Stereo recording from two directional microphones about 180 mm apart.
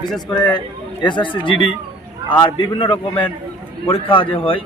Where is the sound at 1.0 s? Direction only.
25° left (ahead or behind).